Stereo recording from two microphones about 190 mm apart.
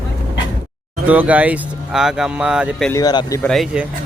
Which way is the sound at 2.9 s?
20° left (ahead or behind).